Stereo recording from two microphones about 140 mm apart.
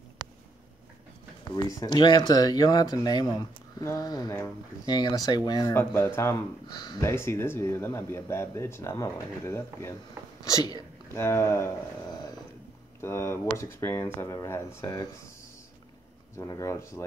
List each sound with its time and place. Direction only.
1.5 s speech: 30° left (ahead or behind)
6.7 s speech: 30° left (ahead or behind)
7.1 s speech: 20° left (ahead or behind)
13.0 s speech: 20° left (ahead or behind)
16.3 s speech: 20° left (ahead or behind)